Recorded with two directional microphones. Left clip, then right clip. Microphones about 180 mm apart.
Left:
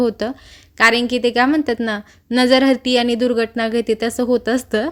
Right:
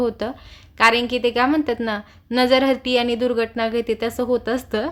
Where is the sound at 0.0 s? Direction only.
30° left (ahead or behind).